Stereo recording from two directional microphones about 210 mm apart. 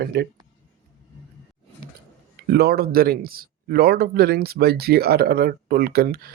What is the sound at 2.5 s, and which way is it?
Speech, 50° right (ahead or behind).